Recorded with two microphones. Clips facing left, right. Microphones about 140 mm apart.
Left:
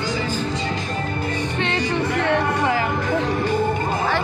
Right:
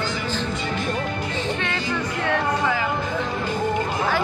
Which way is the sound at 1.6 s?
65° left (ahead or behind).